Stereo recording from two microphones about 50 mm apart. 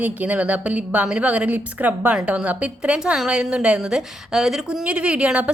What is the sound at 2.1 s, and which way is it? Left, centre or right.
A woman's voice, right.